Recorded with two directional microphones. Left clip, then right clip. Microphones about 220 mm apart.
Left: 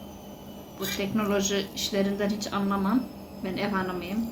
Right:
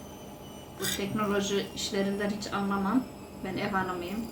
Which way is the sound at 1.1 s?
25° left (ahead or behind).